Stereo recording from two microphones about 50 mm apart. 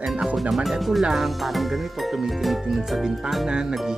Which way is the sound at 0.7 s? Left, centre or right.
Centre.